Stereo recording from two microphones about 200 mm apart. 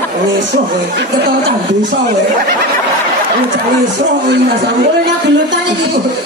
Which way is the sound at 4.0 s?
60° right (ahead or behind).